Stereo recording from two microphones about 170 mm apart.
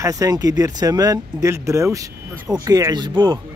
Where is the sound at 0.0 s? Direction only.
20° right (ahead or behind).